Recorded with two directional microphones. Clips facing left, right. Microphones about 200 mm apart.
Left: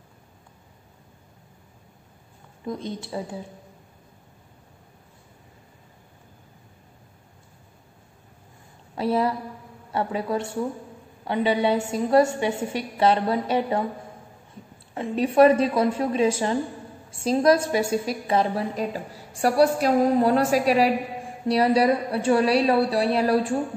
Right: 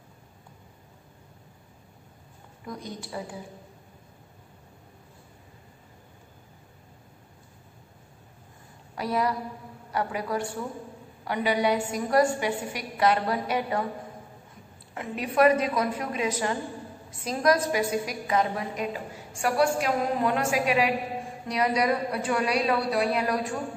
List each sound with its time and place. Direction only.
2.6 s a woman's voice: 25° left (ahead or behind)
8.9 s a woman's voice: 25° left (ahead or behind)
15.0 s a woman's voice: 30° left (ahead or behind)